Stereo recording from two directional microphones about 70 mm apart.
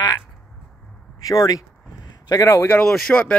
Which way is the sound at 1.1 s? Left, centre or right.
Left.